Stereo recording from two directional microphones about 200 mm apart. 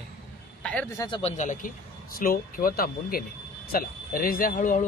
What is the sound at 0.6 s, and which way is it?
Speech, 5° left (ahead or behind).